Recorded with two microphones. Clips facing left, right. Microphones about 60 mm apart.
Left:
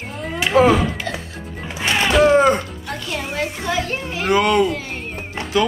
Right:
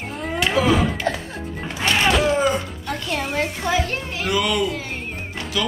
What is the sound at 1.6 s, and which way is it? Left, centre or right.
Music, centre.